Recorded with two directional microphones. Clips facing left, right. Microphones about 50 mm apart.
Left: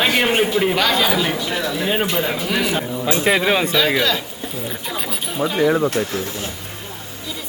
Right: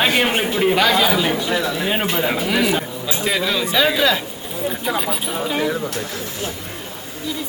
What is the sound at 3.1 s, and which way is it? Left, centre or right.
Speech, left.